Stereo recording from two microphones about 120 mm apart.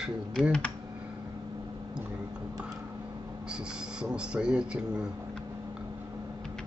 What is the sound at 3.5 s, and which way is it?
Speech, 5° right (ahead or behind).